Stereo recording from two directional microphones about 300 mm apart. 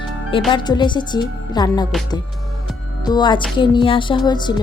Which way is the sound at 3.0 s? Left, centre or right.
Centre.